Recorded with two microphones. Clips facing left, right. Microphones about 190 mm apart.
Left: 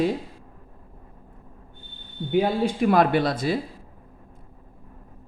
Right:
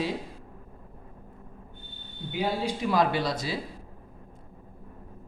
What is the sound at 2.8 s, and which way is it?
Speech, 60° left (ahead or behind).